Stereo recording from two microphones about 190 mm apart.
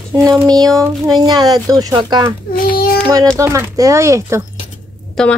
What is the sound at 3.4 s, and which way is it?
Speech, 15° right (ahead or behind).